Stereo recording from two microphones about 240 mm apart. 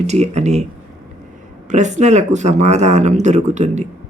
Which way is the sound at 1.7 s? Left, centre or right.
Right.